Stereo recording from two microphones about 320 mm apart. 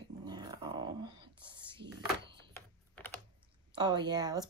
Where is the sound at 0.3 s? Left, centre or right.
Centre.